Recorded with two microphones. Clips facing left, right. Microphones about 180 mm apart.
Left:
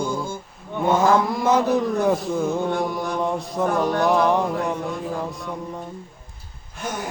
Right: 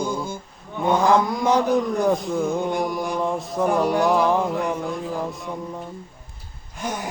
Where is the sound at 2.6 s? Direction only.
15° right (ahead or behind).